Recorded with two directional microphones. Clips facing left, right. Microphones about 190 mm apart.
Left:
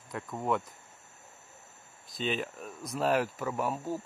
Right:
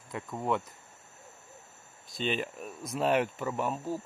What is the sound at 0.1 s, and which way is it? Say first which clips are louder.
Speech: even; centre (ahead or behind).